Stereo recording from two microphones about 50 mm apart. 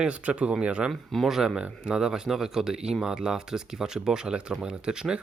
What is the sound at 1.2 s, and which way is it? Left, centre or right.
Speech, centre.